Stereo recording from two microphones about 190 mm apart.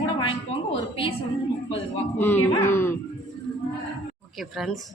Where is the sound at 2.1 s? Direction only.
10° left (ahead or behind).